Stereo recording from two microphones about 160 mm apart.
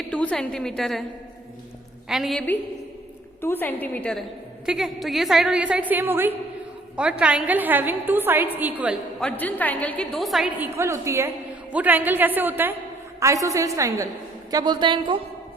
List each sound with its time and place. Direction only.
0.1 s a woman's voice: 5° left (ahead or behind)
2.0 s a woman's voice: centre (ahead or behind)
3.4 s a woman's voice: 10° left (ahead or behind)
4.6 s a woman's voice: centre (ahead or behind)
9.4 s a woman's voice: 10° left (ahead or behind)
10.8 s a woman's voice: 20° right (ahead or behind)